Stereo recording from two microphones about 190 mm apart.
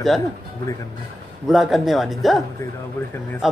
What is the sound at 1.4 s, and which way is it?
Speech, centre (ahead or behind).